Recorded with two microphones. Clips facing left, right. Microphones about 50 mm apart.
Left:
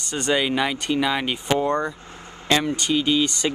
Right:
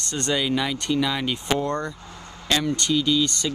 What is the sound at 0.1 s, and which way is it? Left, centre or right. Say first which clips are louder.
Speech: left 3 dB; centre.